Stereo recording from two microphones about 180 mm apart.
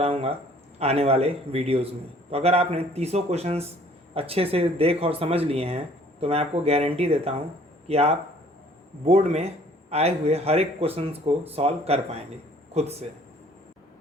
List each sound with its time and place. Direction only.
0.0 s speech: 30° right (ahead or behind)